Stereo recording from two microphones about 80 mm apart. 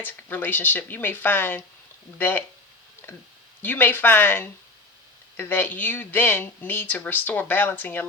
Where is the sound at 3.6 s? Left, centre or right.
Left.